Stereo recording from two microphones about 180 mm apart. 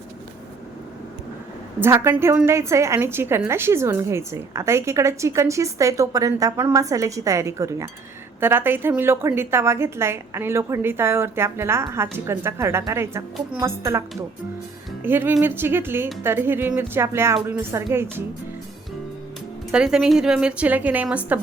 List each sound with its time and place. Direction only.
1.8 s a woman's voice: 15° right (ahead or behind)
19.7 s a woman's voice: 5° right (ahead or behind)